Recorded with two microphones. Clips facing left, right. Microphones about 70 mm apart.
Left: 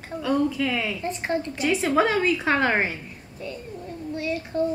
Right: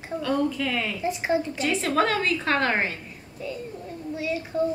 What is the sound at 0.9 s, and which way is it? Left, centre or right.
Speech, centre.